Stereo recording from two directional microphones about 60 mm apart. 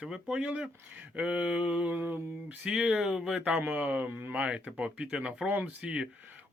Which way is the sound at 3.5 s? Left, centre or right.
Right.